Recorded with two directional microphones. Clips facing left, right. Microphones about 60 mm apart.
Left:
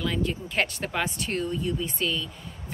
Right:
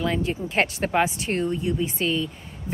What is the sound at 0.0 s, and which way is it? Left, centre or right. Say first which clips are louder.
Speech: right 3 dB; right.